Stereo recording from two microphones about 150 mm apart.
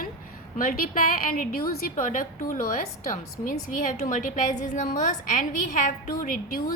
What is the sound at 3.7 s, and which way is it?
A woman's voice, 60° left (ahead or behind).